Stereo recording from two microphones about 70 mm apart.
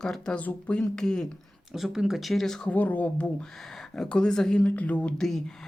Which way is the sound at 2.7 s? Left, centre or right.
Left.